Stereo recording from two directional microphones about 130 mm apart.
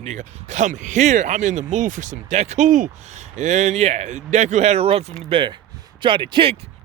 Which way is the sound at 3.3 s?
65° right (ahead or behind).